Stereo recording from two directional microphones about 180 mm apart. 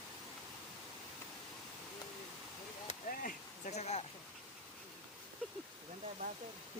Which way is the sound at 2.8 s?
45° left (ahead or behind).